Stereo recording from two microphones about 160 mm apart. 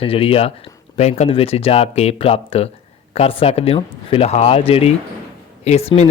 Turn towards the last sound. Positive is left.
turn(degrees=40)  # may be behind; listen again after turning